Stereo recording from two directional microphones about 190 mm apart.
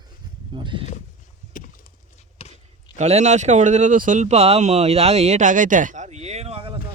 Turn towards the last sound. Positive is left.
turn(degrees=-30)  # may be behind; listen again after turning